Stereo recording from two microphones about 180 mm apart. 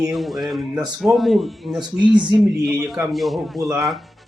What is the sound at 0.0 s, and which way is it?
Speech, centre (ahead or behind).